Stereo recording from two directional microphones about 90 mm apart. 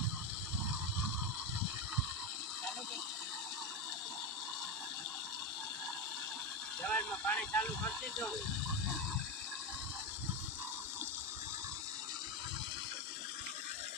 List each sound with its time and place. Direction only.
6.8 s speech: 15° left (ahead or behind)